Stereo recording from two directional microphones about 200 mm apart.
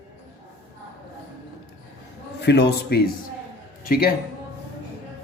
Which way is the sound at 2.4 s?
55° left (ahead or behind).